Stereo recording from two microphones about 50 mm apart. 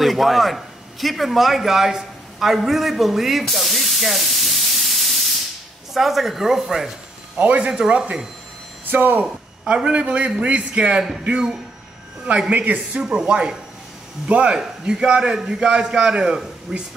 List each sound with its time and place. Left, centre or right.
0.0 s a man's voice: centre
3.4 s spray: centre
5.9 s a man's voice: centre
7.4 s speech: right
8.9 s speech: right
9.8 s a man's voice: right
12.3 s speech: right
13.0 s a man's voice: centre